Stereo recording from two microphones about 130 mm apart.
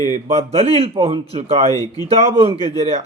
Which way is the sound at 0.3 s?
55° right (ahead or behind).